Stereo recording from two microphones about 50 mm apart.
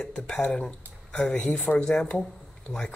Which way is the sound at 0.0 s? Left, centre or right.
Centre.